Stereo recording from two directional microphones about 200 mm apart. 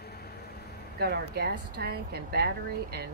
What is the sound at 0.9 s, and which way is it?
A woman's voice, 55° right (ahead or behind).